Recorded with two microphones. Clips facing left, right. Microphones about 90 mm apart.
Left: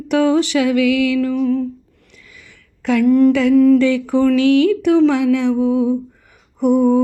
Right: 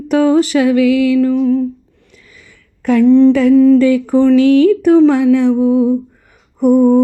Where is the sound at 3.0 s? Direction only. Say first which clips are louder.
Right 4 dB; 25° right (ahead or behind).